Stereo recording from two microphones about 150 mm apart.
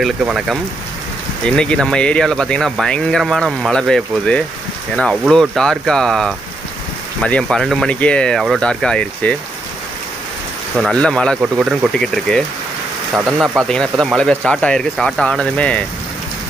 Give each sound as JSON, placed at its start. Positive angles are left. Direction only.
{"t": 0.0, "sound": "speech", "side_deg": -5}
{"t": 1.6, "sound": "speech", "side_deg": 5}
{"t": 10.8, "sound": "speech", "side_deg": 5}
{"t": 11.4, "sound": "speech", "side_deg": -5}
{"t": 13.1, "sound": "speech", "side_deg": -5}